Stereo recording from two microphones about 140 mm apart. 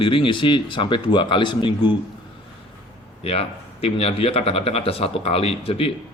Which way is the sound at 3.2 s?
45° left (ahead or behind).